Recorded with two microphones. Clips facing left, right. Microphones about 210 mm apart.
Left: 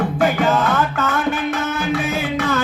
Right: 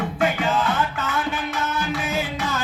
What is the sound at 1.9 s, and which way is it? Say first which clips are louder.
Music: left 5 dB; 60° left (ahead or behind).